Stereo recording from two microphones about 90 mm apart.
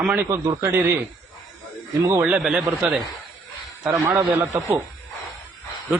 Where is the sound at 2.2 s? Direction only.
10° right (ahead or behind).